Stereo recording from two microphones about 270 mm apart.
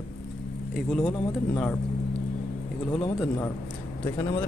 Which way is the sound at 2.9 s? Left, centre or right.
Centre.